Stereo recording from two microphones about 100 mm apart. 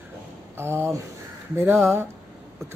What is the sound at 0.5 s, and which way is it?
Speech, 25° right (ahead or behind).